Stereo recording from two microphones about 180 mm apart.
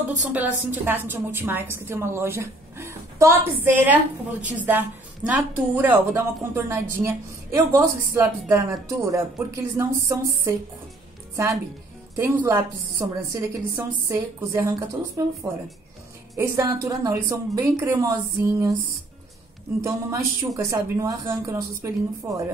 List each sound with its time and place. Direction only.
0.3 s a woman's voice: 10° right (ahead or behind)
16.3 s a woman's voice: 20° right (ahead or behind)
19.8 s a woman's voice: 15° right (ahead or behind)